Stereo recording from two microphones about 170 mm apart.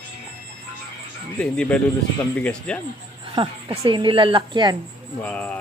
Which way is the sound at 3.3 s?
30° right (ahead or behind).